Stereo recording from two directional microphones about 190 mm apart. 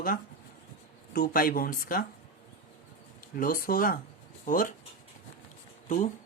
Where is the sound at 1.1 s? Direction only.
50° left (ahead or behind).